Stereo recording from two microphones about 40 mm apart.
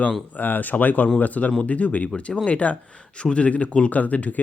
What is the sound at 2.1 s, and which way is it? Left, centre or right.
Speech, left.